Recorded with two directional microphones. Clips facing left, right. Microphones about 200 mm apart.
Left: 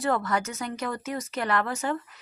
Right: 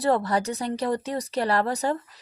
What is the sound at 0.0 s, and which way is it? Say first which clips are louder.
Speech: right 4 dB; 35° right (ahead or behind).